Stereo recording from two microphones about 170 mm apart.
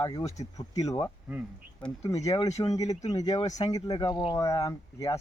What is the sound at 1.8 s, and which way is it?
Speech, 5° left (ahead or behind).